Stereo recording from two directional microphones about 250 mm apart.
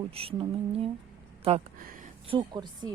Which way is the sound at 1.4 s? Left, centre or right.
Right.